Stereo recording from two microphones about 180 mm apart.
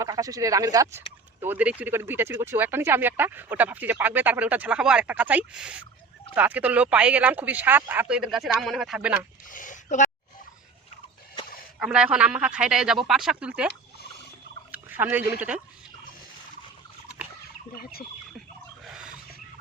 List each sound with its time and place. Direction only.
0.0 s speech: 20° right (ahead or behind)
9.5 s speech: 45° left (ahead or behind)
11.8 s a man's voice: 5° right (ahead or behind)
14.7 s speech: 10° right (ahead or behind)
18.9 s a sound: 5° right (ahead or behind)